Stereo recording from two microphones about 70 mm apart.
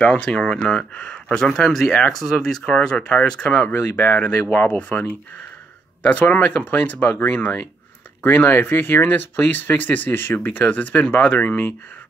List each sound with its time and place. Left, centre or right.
0.0 s speech: centre
3.7 s speech: left
6.0 s speech: left